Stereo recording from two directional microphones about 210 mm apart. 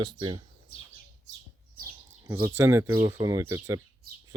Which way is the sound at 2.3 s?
10° right (ahead or behind).